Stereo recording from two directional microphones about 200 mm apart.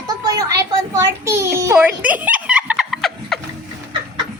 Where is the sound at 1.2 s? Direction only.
15° right (ahead or behind).